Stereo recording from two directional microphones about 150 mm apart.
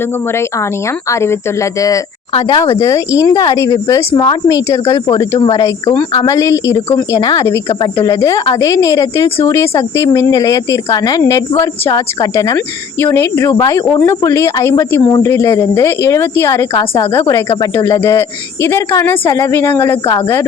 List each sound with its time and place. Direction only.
1.1 s a woman's voice: 15° left (ahead or behind)
2.3 s a woman's voice: 35° left (ahead or behind); by 20.0 s 15° left (ahead or behind)